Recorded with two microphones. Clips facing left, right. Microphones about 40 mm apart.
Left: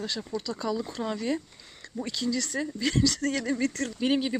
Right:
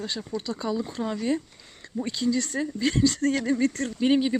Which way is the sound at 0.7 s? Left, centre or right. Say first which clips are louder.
Right 2 dB; centre.